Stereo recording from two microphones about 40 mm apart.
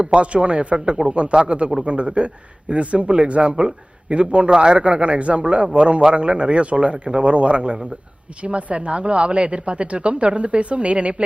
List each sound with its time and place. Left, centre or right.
0.0 s a man's voice: right